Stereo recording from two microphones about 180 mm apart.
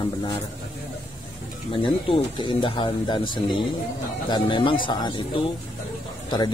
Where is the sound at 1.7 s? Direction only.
30° left (ahead or behind).